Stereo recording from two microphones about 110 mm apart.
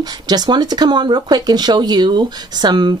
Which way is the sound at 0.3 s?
40° right (ahead or behind).